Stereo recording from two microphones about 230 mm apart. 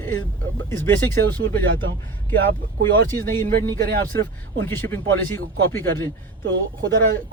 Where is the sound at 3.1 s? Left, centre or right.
Centre.